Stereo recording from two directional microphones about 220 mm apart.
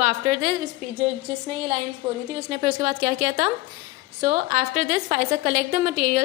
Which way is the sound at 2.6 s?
30° right (ahead or behind).